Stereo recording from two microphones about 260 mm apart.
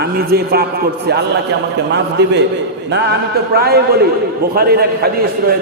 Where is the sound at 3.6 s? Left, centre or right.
Right.